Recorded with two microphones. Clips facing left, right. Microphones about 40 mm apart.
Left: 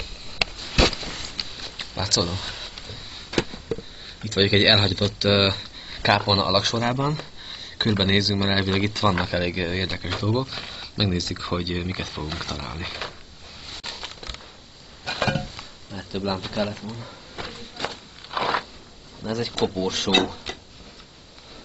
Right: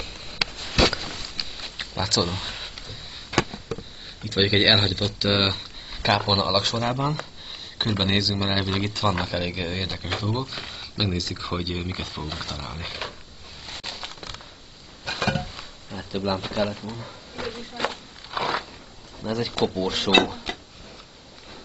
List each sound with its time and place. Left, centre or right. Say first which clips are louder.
2.0 s speech: even; right
2.4 s a sound: even; centre
4.4 s speech: left 1 dB; centre
13.8 s a sound: left 1 dB; centre
15.9 s speech: right 1 dB; centre
17.8 s a sound: right 3 dB; centre
18.3 s crunch: left 2 dB; centre
19.2 s speech: even; centre
19.9 s speech: right 1 dB; centre